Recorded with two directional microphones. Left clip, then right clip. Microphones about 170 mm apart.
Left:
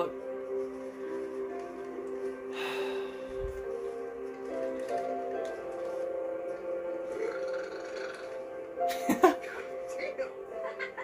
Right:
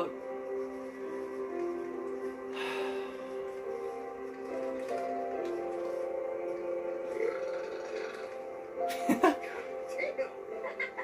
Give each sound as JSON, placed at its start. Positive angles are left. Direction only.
{"t": 2.6, "sound": "music", "side_deg": 25}
{"t": 8.8, "sound": "music", "side_deg": 25}